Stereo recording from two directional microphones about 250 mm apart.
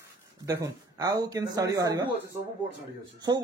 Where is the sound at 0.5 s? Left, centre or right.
Centre.